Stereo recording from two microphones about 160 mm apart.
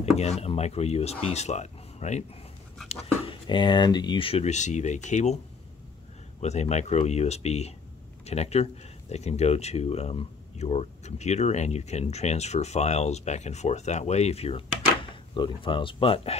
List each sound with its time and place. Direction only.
0.2 s speech: 40° left (ahead or behind)
2.9 s speech: 30° left (ahead or behind)
6.4 s speech: 45° left (ahead or behind)